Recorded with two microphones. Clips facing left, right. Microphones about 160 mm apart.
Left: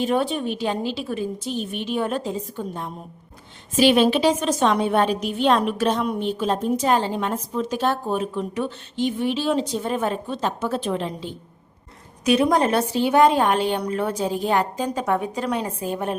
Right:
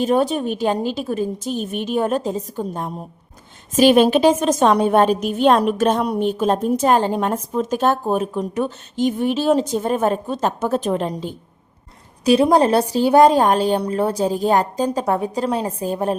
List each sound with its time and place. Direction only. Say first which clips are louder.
0.0 s a woman's voice: right 4 dB; 40° right (ahead or behind)
12.2 s a woman's voice: right 4 dB; 30° right (ahead or behind)